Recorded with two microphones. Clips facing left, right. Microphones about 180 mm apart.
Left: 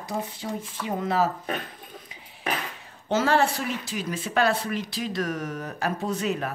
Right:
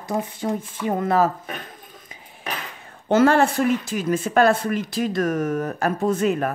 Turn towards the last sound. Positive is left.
turn(degrees=-50)  # may be behind; listen again after turning